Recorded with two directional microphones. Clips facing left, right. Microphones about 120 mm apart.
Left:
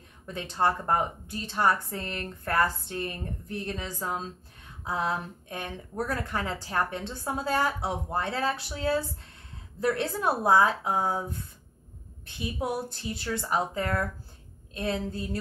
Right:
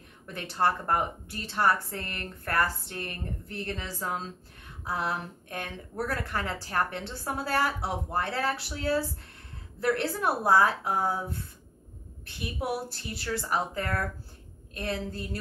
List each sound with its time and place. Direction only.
0.3 s a woman's voice: 20° left (ahead or behind)
12.4 s a woman's voice: 20° left (ahead or behind)